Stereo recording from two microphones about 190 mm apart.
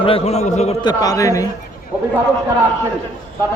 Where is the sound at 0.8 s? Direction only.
20° left (ahead or behind).